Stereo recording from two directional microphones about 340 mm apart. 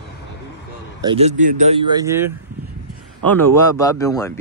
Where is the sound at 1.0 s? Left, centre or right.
Centre.